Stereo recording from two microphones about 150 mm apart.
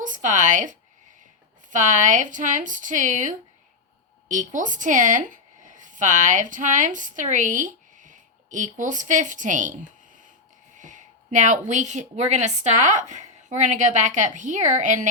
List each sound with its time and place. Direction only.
0.0 s speech: 60° right (ahead or behind)
10.8 s a woman's voice: 55° right (ahead or behind)